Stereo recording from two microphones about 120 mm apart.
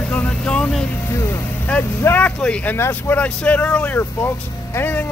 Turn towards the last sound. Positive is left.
turn(degrees=15)  # may be behind; listen again after turning